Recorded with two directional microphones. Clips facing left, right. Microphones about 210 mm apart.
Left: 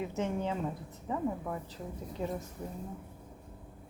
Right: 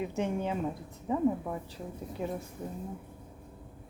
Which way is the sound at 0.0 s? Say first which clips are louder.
Right 2 dB; 15° right (ahead or behind).